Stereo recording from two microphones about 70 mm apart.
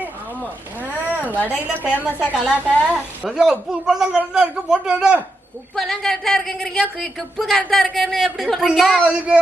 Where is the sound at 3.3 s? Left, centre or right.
Centre.